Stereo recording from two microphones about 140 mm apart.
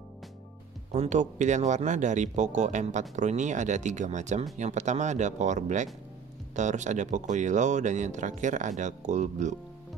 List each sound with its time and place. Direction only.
0.9 s speech: 60° right (ahead or behind)